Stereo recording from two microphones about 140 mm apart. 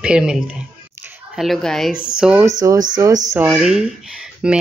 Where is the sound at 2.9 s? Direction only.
25° right (ahead or behind).